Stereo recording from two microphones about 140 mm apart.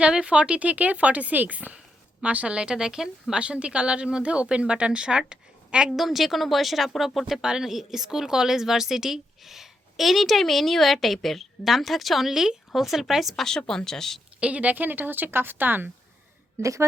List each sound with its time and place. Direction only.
0.0 s a woman's voice: 5° right (ahead or behind)
14.3 s a woman's voice: 10° right (ahead or behind)